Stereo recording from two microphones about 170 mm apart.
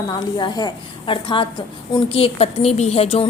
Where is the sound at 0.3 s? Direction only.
25° left (ahead or behind).